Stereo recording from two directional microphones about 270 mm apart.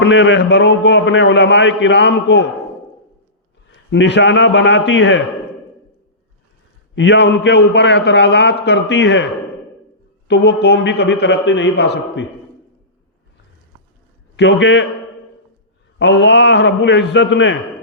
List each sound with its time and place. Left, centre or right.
0.0 s a man's voice: left
3.9 s a man's voice: left
6.9 s a man's voice: left
10.2 s a man's voice: left
14.3 s a man's voice: left
16.0 s a man's voice: left